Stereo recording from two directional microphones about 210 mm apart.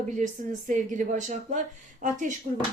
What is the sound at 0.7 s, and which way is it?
Speech, 35° right (ahead or behind).